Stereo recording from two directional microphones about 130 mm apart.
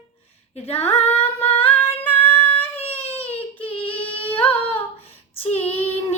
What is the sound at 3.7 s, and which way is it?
Humming, 10° left (ahead or behind).